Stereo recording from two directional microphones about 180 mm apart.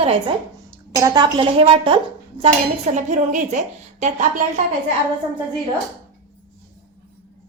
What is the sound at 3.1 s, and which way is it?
A woman's voice, 40° right (ahead or behind).